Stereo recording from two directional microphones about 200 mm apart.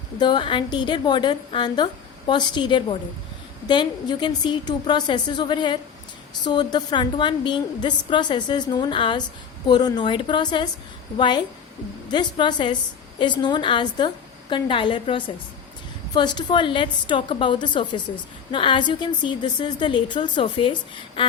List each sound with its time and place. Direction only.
0.2 s a woman's voice: 25° left (ahead or behind)